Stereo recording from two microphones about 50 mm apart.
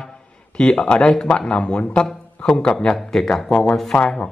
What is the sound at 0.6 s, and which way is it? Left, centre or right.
A man's voice, centre.